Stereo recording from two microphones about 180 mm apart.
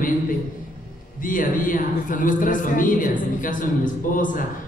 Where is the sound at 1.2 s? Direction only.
50° left (ahead or behind).